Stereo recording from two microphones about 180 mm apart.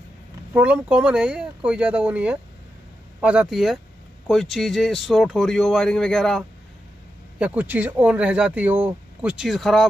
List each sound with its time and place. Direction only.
0.5 s speech: 10° right (ahead or behind)
7.3 s speech: 10° right (ahead or behind)